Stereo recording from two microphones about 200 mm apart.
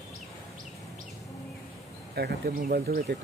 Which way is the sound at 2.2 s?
50° right (ahead or behind).